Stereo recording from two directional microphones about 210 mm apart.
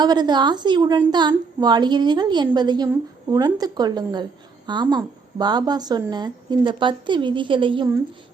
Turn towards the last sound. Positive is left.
turn(degrees=-20)  # may be behind; listen again after turning